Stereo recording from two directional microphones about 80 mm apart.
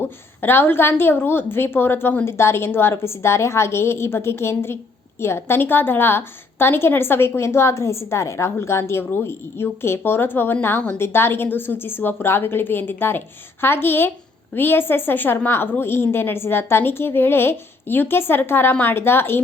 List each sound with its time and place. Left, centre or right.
0.0 s a woman's voice: left